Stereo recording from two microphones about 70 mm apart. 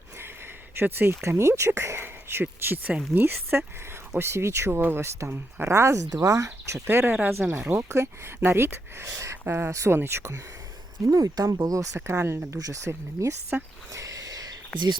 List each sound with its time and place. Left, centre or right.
0.8 s speech: right
6.1 s speech: right
6.8 s speech: right
7.9 s speech: right
11.1 s speech: right
11.9 s speech: right
12.5 s speech: right
13.5 s speech: right
13.9 s a sound: right
14.7 s speech: centre